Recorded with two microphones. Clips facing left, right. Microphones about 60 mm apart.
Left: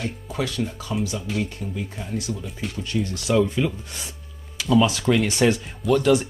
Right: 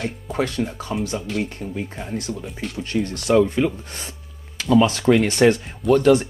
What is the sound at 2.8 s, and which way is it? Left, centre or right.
Speech, right.